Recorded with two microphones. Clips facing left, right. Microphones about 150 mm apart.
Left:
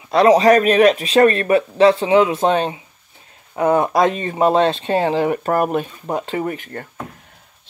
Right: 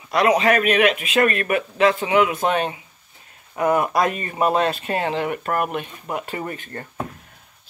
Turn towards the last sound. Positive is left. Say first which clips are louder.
# left 6 dB
turn(degrees=20)  # may be behind; listen again after turning